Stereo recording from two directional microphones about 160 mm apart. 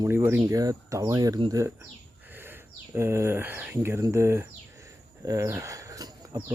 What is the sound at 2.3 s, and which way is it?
Speech, 15° right (ahead or behind).